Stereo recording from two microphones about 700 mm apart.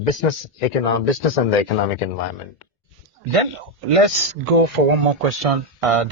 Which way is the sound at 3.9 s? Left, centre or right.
Right.